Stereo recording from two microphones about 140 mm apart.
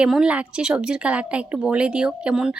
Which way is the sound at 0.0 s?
5° right (ahead or behind).